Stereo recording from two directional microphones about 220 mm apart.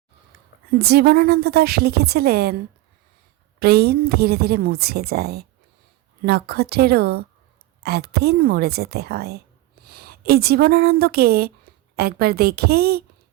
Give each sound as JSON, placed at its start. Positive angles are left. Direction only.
{"t": 0.8, "sound": "a woman's voice", "side_deg": -45}
{"t": 3.6, "sound": "a woman's voice", "side_deg": -45}